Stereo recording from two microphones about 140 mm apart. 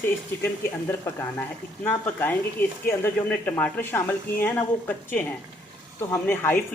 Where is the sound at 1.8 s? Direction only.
15° left (ahead or behind).